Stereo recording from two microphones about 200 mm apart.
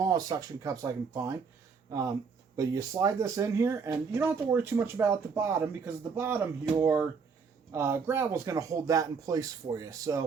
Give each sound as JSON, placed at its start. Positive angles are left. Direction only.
{"t": 0.0, "sound": "speech", "side_deg": -20}
{"t": 2.6, "sound": "speech", "side_deg": -15}